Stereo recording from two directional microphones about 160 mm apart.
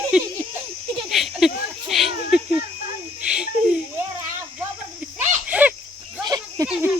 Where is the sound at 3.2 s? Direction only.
5° right (ahead or behind).